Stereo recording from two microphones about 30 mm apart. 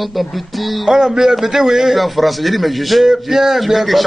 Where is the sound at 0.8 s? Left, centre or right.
Centre.